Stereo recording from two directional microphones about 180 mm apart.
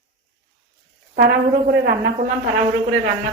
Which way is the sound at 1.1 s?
65° right (ahead or behind).